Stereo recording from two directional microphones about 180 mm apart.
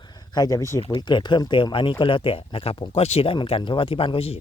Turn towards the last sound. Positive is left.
turn(degrees=30)  # may be behind; listen again after turning